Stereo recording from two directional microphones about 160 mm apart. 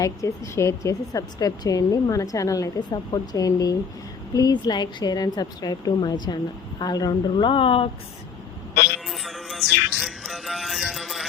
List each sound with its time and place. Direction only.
0.0 s a woman's voice: 20° left (ahead or behind); by 7.9 s 35° left (ahead or behind)
9.0 s music: centre (ahead or behind)